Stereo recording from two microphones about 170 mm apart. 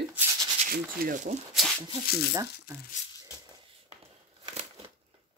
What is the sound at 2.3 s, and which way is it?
Speech, 15° right (ahead or behind).